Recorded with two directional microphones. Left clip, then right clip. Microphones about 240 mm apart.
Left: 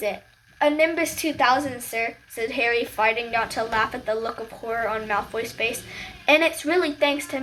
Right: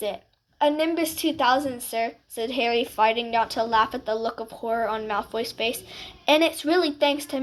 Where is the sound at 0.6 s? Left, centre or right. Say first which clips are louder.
Left 2 dB; right.